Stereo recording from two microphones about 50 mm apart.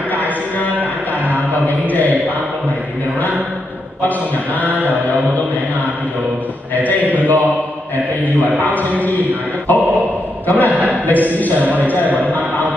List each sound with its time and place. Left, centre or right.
1.3 s chant: left
4.6 s mantra: left
6.7 s a sound: left
9.7 s a sound: left
10.4 s a man's voice: left
10.7 s a sound: right
11.1 s mantra: left
11.6 s a man's voice: right
12.3 s music: left